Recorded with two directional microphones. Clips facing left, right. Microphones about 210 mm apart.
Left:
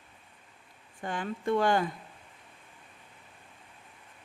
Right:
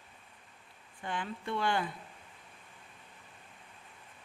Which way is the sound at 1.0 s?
45° left (ahead or behind).